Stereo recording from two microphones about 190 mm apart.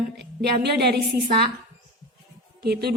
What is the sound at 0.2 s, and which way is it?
A woman's voice, 60° right (ahead or behind).